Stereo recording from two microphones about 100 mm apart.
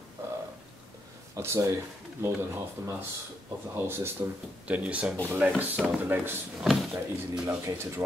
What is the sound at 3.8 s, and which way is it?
Speech, 25° right (ahead or behind).